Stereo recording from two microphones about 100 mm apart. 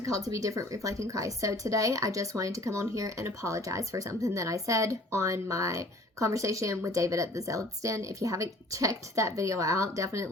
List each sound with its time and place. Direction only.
0.3 s speech: 35° right (ahead or behind)